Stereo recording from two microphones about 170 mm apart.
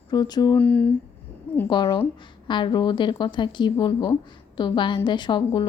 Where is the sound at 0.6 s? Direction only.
10° left (ahead or behind).